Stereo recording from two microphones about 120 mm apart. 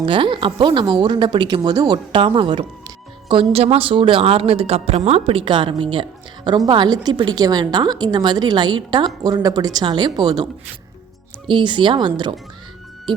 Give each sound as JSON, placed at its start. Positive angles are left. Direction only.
{"t": 0.0, "sound": "a woman's voice", "side_deg": -45}